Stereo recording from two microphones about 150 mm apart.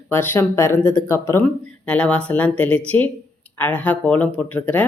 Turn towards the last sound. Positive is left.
turn(degrees=10)  # may be behind; listen again after turning